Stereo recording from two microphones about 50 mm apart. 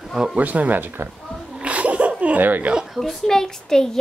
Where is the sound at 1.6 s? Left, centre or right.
Right.